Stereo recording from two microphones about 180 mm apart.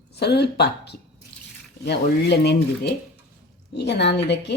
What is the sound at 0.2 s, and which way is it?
A woman's voice, 65° left (ahead or behind).